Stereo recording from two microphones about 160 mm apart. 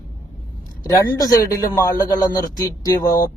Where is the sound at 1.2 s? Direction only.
20° left (ahead or behind).